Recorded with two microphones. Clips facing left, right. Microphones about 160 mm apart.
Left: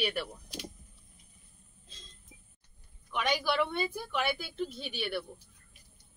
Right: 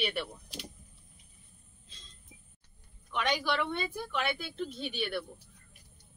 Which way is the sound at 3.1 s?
5° left (ahead or behind).